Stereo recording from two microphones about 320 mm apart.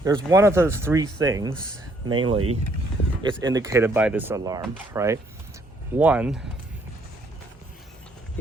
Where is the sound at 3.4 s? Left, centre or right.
Centre.